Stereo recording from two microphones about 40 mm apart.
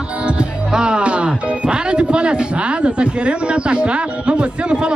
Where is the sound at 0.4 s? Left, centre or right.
Right.